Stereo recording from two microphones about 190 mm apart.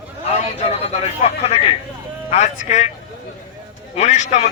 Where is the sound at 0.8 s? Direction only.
35° left (ahead or behind).